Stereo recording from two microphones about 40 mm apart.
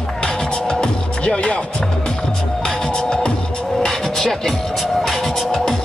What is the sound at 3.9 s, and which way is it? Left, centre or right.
Music, centre.